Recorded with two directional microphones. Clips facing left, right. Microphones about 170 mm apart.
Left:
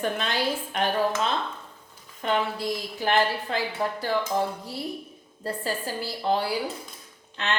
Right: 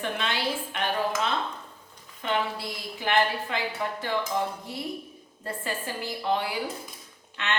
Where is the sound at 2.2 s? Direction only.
40° left (ahead or behind).